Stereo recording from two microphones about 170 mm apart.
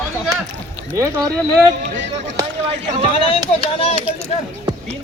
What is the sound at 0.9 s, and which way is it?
Speech, 15° right (ahead or behind).